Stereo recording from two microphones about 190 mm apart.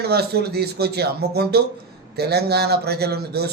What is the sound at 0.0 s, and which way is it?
Speech, 55° right (ahead or behind).